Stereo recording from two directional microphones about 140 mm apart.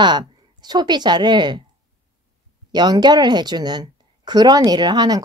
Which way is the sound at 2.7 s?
30° right (ahead or behind).